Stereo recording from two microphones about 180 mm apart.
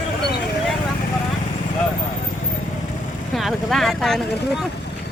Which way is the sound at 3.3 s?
Centre (ahead or behind).